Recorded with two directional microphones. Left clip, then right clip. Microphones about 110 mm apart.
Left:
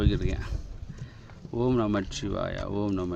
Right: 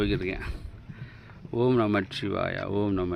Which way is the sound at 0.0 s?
5° left (ahead or behind).